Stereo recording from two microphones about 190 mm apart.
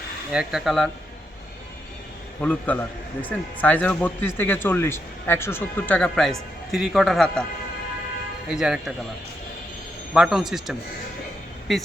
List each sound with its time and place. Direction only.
0.3 s a man's voice: 5° right (ahead or behind)
2.4 s a man's voice: 10° left (ahead or behind)
8.4 s a man's voice: 5° right (ahead or behind)
10.2 s a man's voice: centre (ahead or behind)